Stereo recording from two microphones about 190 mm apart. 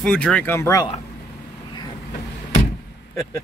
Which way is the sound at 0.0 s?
5° left (ahead or behind).